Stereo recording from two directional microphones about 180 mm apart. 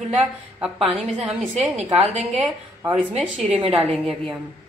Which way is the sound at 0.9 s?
5° right (ahead or behind).